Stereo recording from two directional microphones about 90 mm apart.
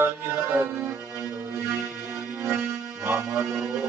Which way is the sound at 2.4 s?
15° right (ahead or behind).